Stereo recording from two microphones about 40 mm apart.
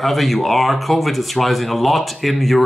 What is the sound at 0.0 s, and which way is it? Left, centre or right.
Speech, centre.